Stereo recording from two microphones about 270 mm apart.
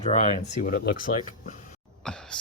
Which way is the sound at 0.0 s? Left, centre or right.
Left.